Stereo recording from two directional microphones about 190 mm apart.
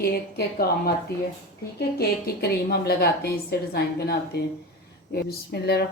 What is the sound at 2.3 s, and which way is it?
A woman's voice, 55° left (ahead or behind).